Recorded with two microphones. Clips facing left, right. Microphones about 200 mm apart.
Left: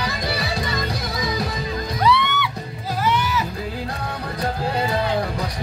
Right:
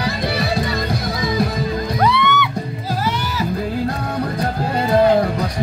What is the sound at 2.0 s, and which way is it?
Music, 55° right (ahead or behind).